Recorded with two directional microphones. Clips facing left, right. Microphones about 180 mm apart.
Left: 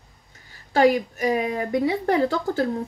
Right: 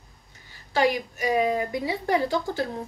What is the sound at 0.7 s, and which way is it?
A woman's voice, 50° left (ahead or behind).